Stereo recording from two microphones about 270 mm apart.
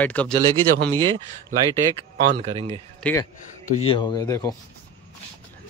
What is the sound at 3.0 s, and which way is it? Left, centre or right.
Speech, centre.